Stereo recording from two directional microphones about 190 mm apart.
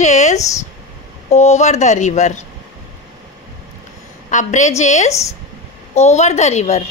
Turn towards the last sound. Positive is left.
turn(degrees=35)  # may be behind; listen again after turning